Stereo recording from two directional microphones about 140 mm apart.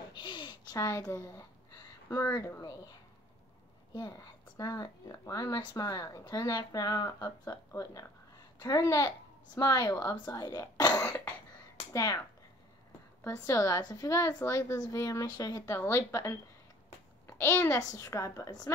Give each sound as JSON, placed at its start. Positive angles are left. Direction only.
{"t": 0.1, "sound": "a sound", "side_deg": 35}
{"t": 2.0, "sound": "speech", "side_deg": 20}
{"t": 3.9, "sound": "speech", "side_deg": 30}